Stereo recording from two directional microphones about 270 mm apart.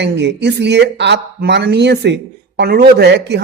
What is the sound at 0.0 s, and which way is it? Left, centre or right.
Speech, right.